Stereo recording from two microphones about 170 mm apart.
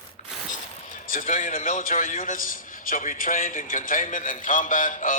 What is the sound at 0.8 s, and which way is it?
A man's voice, 50° left (ahead or behind).